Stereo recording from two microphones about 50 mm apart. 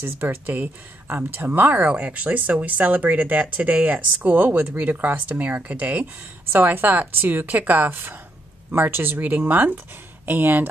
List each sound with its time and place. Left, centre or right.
0.0 s speech: right
6.5 s speech: right